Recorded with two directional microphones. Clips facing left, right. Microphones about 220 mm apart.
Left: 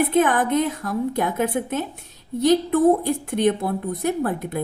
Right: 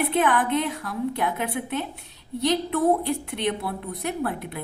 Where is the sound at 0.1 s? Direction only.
45° left (ahead or behind).